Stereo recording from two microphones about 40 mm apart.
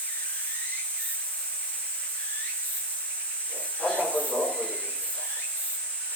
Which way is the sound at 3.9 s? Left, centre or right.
Left.